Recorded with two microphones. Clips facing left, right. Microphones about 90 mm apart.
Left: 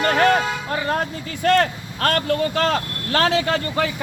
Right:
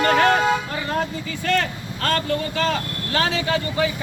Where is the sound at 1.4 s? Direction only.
50° left (ahead or behind).